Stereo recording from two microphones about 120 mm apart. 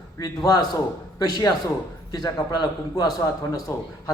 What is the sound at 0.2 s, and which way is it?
A man's voice, 30° left (ahead or behind).